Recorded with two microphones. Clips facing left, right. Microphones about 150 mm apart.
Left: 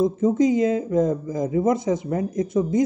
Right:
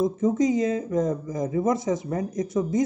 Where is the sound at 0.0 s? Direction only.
25° left (ahead or behind).